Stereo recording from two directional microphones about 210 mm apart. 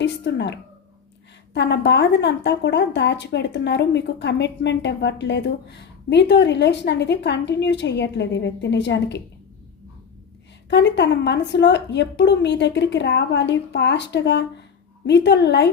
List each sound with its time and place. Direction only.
0.0 s a woman's voice: 55° left (ahead or behind)
10.7 s a woman's voice: 55° left (ahead or behind)